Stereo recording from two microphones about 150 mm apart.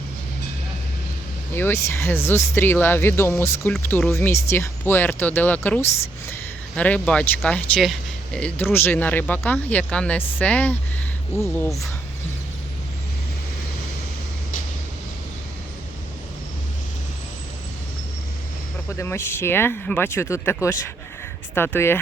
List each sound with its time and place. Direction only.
1.5 s speech: 15° left (ahead or behind)
18.9 s speech: 15° left (ahead or behind)